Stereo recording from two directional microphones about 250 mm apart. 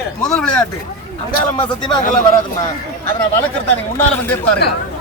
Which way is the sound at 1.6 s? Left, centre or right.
Centre.